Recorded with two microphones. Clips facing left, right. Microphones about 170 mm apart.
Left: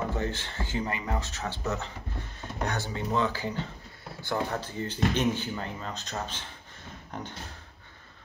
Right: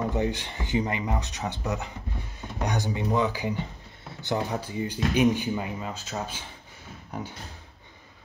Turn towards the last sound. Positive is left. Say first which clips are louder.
# right 3 dB
turn(degrees=-10)  # may be behind; listen again after turning